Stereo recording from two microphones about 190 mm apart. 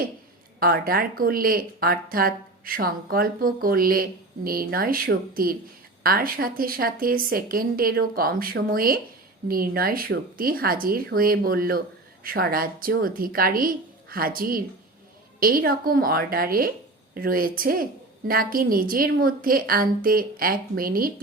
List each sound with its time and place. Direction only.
0.6 s speech: 50° right (ahead or behind)